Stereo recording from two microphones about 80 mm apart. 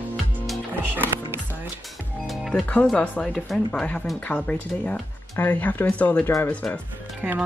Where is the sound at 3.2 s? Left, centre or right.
Centre.